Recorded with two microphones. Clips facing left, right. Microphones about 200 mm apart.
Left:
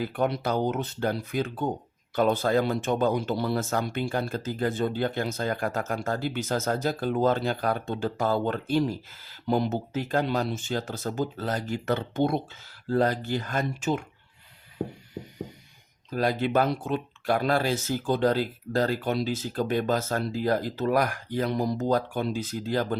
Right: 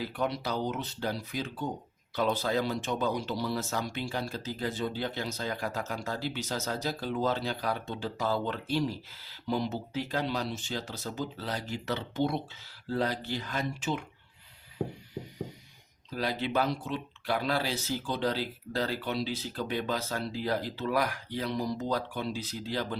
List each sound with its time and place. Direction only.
0.0 s speech: 50° left (ahead or behind)
16.0 s speech: 50° left (ahead or behind)